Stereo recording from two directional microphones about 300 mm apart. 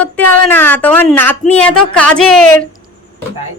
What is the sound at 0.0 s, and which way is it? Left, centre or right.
A woman's voice, centre.